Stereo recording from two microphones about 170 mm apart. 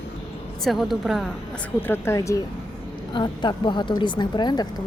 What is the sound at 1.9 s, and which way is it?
Speech, 15° left (ahead or behind).